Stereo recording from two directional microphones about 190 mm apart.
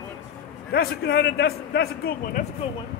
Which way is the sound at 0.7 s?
60° left (ahead or behind).